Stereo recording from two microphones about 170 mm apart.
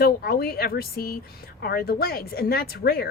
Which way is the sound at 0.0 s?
65° left (ahead or behind).